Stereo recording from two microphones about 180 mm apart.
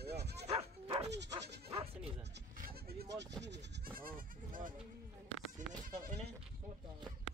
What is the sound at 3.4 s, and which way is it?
Goat, 75° right (ahead or behind).